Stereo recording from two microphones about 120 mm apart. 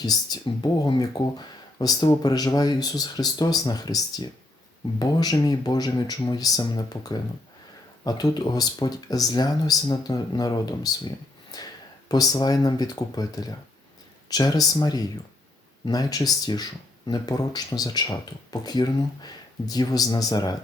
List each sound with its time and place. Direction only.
0.0 s speech: 35° left (ahead or behind)